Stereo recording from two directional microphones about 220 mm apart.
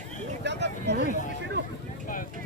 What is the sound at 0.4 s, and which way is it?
Speech, 50° right (ahead or behind).